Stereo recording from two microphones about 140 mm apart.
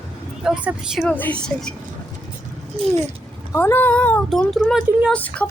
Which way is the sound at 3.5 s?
15° left (ahead or behind).